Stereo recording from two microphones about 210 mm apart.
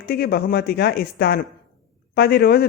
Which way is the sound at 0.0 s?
45° left (ahead or behind).